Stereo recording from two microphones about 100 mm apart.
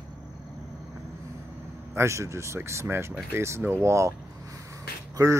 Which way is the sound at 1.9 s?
30° right (ahead or behind).